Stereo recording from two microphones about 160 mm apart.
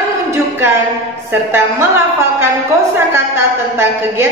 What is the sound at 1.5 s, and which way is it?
A woman's voice, 15° right (ahead or behind).